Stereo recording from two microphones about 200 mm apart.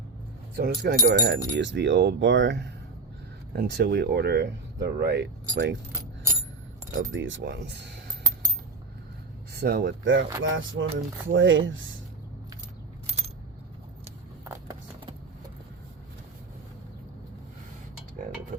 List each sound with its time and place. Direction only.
0.5 s speech: 50° right (ahead or behind)
1.5 s speech: 60° right (ahead or behind)
3.5 s speech: 50° right (ahead or behind)
7.0 s speech: 70° right (ahead or behind)
9.5 s speech: 55° right (ahead or behind); by 11.9 s 75° right (ahead or behind)
14.4 s a sound: 15° right (ahead or behind)